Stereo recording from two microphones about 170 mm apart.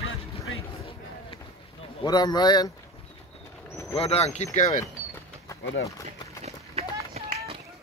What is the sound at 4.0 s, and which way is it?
Speech, 35° left (ahead or behind).